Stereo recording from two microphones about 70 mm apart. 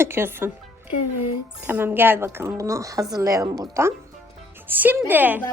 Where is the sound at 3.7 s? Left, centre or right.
Right.